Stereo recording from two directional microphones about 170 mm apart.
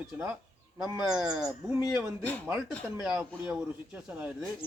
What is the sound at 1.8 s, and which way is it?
Speech, 10° right (ahead or behind).